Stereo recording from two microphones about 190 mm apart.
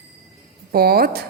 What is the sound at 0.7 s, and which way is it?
Speech, 55° right (ahead or behind).